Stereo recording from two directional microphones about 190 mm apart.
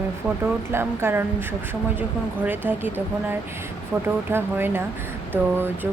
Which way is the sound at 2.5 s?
10° right (ahead or behind).